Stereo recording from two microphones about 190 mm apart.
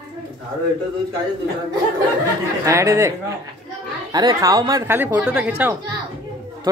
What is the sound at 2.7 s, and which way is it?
Speech, 15° right (ahead or behind).